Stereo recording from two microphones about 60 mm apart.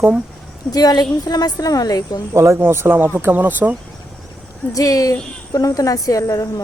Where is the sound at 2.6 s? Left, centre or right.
Right.